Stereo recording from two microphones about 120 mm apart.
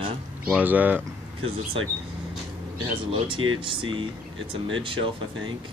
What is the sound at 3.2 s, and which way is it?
Speech, 40° right (ahead or behind).